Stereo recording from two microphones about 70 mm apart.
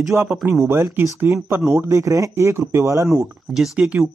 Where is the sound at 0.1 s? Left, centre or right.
Right.